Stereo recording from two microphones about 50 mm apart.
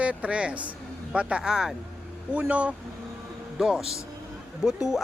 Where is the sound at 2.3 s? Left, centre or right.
Right.